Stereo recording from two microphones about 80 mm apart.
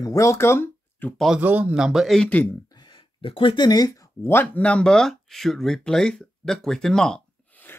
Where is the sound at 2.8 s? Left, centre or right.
Left.